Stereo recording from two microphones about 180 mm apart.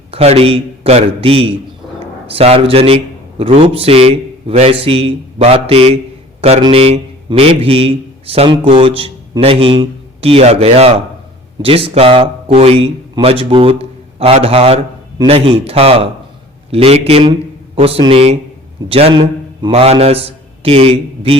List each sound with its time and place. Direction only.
0.1 s a man's voice: 35° right (ahead or behind)